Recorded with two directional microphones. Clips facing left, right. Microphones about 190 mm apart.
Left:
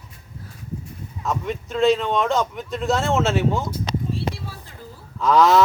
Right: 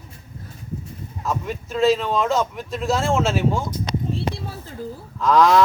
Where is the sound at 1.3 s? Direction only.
Centre (ahead or behind).